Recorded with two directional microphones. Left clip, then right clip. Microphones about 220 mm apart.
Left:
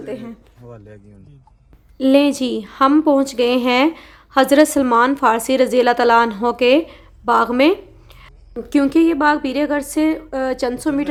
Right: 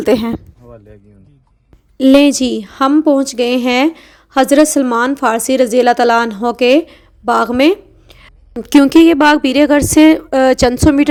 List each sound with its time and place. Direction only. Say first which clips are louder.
0.0 s speech: right 16 dB; 45° right (ahead or behind)
2.0 s a woman's voice: right 5 dB; 30° right (ahead or behind)